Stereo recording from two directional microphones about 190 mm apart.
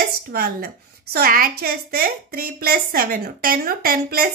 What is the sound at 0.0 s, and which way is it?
A woman's voice, 50° right (ahead or behind).